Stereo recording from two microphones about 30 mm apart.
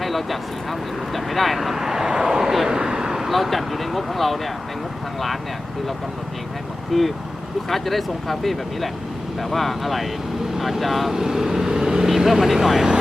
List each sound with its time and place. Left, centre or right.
0.0 s speech: centre
1.7 s vehicle: centre
2.6 s vehicle: right
3.3 s speech: centre
6.9 s speech: centre
11.1 s speech: centre
11.7 s vehicle: right
12.0 s speech: centre